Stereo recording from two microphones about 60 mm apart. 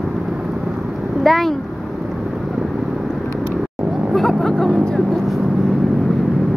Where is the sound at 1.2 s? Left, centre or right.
Centre.